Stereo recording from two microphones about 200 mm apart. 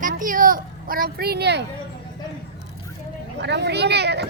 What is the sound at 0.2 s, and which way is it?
Speech, 45° right (ahead or behind).